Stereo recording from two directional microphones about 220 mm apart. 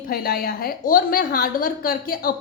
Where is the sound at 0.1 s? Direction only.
45° left (ahead or behind).